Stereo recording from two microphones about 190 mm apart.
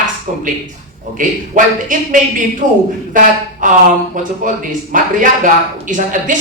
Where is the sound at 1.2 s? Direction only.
45° right (ahead or behind).